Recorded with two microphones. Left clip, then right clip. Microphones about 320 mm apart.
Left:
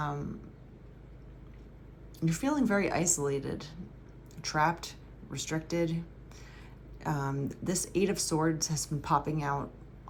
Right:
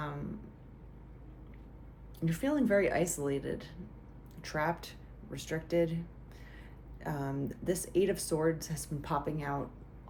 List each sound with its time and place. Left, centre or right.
2.2 s speech: centre
7.0 s speech: centre